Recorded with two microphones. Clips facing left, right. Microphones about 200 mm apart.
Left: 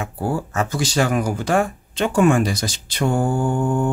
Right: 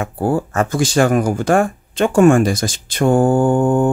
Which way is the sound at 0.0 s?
50° right (ahead or behind).